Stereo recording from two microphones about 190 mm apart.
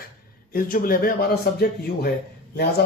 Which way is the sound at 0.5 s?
50° left (ahead or behind).